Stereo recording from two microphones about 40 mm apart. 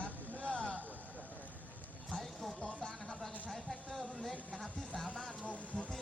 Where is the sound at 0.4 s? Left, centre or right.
Left.